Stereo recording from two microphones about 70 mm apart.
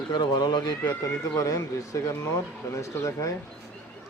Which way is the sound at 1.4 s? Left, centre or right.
Left.